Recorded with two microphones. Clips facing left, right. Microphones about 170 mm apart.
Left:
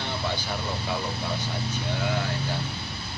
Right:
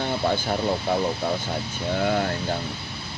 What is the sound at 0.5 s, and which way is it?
Speech, 50° right (ahead or behind).